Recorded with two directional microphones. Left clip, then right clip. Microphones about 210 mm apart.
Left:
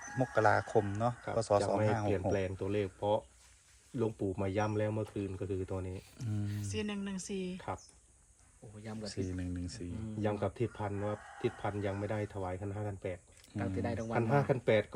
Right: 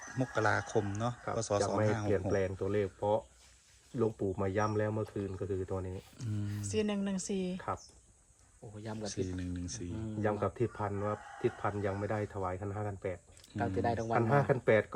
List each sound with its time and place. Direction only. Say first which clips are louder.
0.2 s speech: left 3 dB; centre (ahead or behind)
6.6 s speech: right 7 dB; 35° right (ahead or behind)
8.8 s speech: right 3 dB; 50° right (ahead or behind)
9.1 s speech: right 1 dB; centre (ahead or behind)
13.6 s speech: right 5 dB; 55° right (ahead or behind)
14.3 s speech: right 1 dB; 5° right (ahead or behind)